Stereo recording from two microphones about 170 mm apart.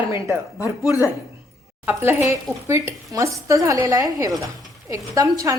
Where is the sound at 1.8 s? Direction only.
15° right (ahead or behind).